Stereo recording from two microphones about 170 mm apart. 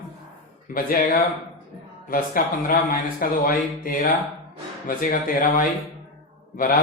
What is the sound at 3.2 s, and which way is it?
Speech, 55° left (ahead or behind).